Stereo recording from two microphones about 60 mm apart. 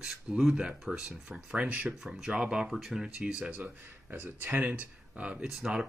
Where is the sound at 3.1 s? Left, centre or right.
Centre.